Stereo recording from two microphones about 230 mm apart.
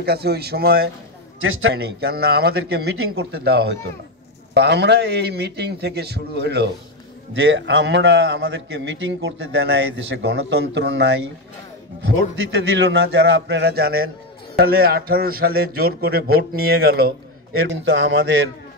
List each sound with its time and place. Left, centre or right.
0.0 s a man's voice: right
1.4 s a man's voice: right
1.8 s a man's voice: right